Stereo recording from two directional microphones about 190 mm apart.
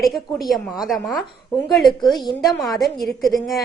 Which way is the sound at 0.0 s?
Centre (ahead or behind).